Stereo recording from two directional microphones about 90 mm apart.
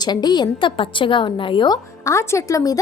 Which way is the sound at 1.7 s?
35° left (ahead or behind).